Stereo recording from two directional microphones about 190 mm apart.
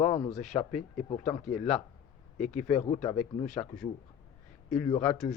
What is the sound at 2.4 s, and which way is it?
Speech, 35° left (ahead or behind).